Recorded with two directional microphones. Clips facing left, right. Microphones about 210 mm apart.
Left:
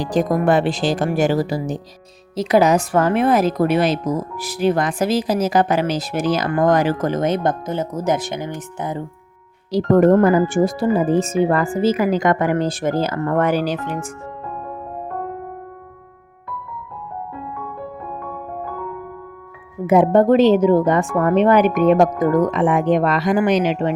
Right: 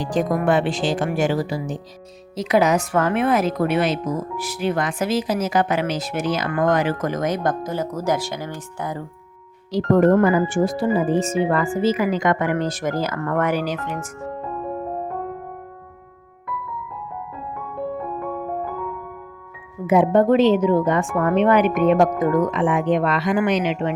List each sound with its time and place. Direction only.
0.0 s speech: 35° left (ahead or behind); by 9.0 s 20° left (ahead or behind)
9.7 s speech: 40° left (ahead or behind)
19.9 s speech: 40° left (ahead or behind)